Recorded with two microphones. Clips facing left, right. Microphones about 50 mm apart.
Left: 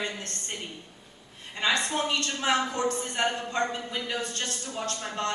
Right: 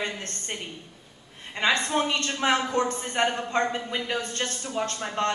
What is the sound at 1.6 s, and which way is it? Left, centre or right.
A man's voice, right.